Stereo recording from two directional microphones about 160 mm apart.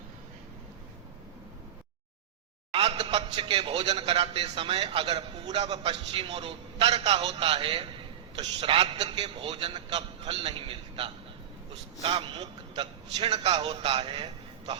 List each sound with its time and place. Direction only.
2.7 s a man's voice: 35° right (ahead or behind)